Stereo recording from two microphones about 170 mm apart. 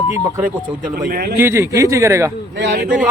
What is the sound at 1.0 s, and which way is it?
Speech, 60° right (ahead or behind).